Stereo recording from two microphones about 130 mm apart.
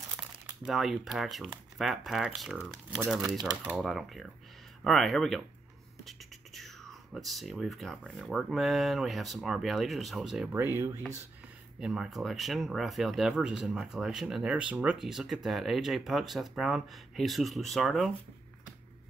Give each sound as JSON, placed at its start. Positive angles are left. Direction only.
{"t": 0.7, "sound": "speech", "side_deg": 0}
{"t": 10.5, "sound": "speech", "side_deg": -20}
{"t": 11.8, "sound": "speech", "side_deg": -5}